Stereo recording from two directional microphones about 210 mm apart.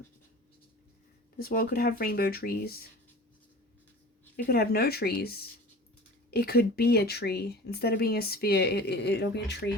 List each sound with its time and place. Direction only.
1.4 s speech: 45° left (ahead or behind)
4.4 s speech: 45° left (ahead or behind)